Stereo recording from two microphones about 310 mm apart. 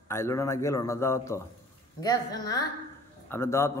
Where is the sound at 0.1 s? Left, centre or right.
Centre.